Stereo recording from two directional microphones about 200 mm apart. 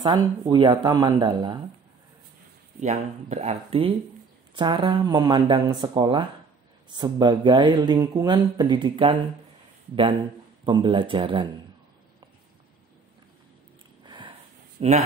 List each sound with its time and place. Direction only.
0.0 s speech: 20° right (ahead or behind)
2.8 s speech: 35° right (ahead or behind)
10.6 s speech: 25° right (ahead or behind)
14.0 s sniff: 25° right (ahead or behind)
14.8 s speech: 30° right (ahead or behind)